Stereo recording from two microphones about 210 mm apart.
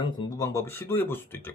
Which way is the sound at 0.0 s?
20° left (ahead or behind).